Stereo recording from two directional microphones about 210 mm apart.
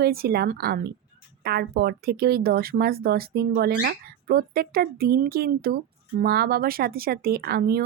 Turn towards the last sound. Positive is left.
turn(degrees=-50)  # may be behind; listen again after turning